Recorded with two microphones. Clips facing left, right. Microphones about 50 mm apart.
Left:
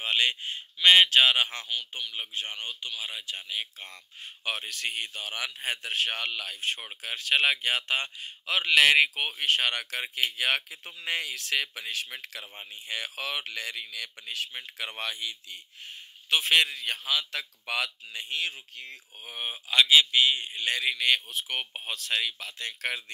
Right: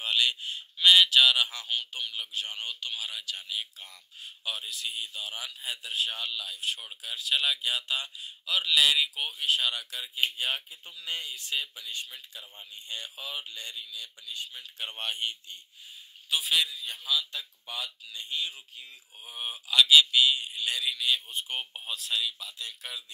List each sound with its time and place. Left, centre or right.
0.0 s a man's voice: left
1.7 s speech: centre
2.1 s a man's voice: left
2.6 s speech: left
3.8 s speech: left
15.5 s speech: left
16.3 s speech: left
19.5 s a man's voice: left
21.3 s speech: left